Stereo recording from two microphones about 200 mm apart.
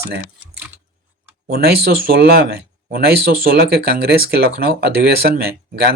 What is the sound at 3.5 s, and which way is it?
Speech, 50° right (ahead or behind).